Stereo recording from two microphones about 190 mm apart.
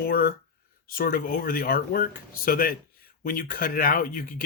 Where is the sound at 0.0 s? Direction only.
50° left (ahead or behind).